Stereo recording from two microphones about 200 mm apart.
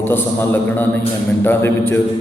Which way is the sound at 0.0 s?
10° left (ahead or behind).